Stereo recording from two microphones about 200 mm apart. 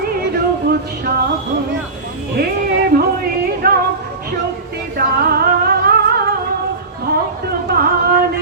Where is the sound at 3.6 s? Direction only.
50° right (ahead or behind).